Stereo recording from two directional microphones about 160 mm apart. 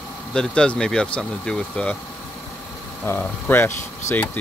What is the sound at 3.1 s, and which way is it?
Speech, 15° left (ahead or behind).